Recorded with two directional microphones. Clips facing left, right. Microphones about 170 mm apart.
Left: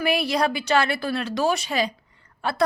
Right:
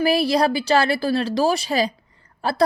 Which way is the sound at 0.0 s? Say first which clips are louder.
Right 4 dB; 35° right (ahead or behind).